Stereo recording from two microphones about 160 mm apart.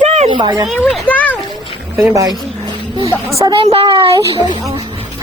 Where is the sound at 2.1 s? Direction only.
25° right (ahead or behind).